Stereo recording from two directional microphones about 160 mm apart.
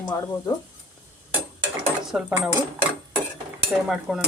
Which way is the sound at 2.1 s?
5° right (ahead or behind).